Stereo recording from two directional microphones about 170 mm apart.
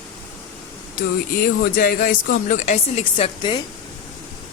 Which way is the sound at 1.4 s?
60° left (ahead or behind).